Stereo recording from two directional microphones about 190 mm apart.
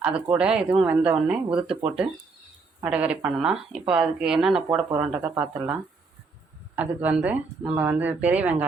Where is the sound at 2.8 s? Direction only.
5° right (ahead or behind).